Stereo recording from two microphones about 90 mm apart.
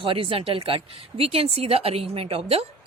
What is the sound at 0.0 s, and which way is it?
Speech, 90° right.